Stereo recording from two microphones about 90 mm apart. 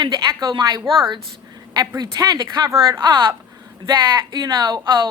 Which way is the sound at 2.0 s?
45° right (ahead or behind).